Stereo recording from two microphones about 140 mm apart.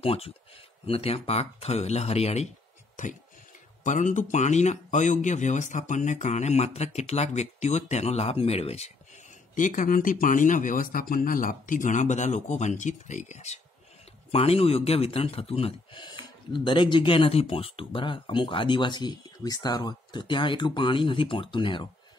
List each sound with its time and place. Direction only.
0.0 s speech: 45° left (ahead or behind)
3.8 s speech: 65° left (ahead or behind)
14.3 s speech: 45° left (ahead or behind)